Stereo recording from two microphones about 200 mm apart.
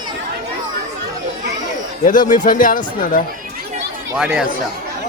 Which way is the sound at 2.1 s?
40° left (ahead or behind).